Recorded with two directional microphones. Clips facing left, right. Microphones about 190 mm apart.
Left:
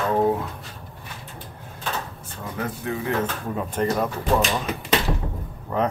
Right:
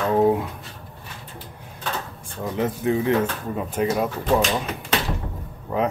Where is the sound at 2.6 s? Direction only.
20° right (ahead or behind).